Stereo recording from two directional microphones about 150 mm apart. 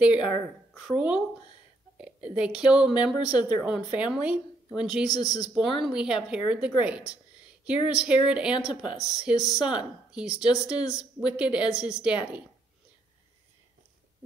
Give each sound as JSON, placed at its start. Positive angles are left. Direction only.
{"t": 0.0, "sound": "a woman's voice", "side_deg": -5}
{"t": 5.1, "sound": "speech", "side_deg": 25}
{"t": 5.5, "sound": "a woman's voice", "side_deg": 0}